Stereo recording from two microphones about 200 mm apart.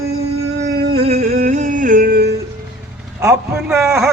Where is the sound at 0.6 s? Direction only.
55° right (ahead or behind).